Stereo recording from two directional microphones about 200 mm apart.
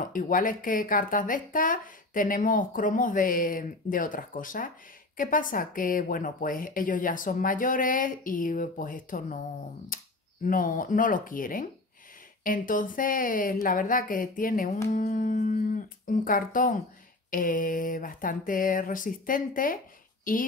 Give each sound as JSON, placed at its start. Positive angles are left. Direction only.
{"t": 0.0, "sound": "speech", "side_deg": 40}